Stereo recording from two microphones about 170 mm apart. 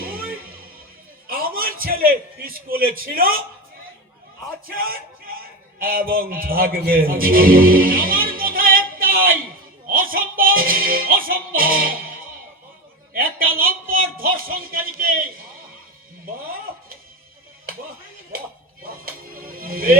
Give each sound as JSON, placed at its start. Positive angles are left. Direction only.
{"t": 0.0, "sound": "music", "side_deg": -60}
{"t": 1.3, "sound": "a man's voice", "side_deg": -60}
{"t": 4.7, "sound": "speech", "side_deg": -60}
{"t": 9.9, "sound": "music", "side_deg": -55}
{"t": 13.1, "sound": "a sound", "side_deg": -55}
{"t": 18.3, "sound": "a sound", "side_deg": -55}
{"t": 19.0, "sound": "music", "side_deg": -55}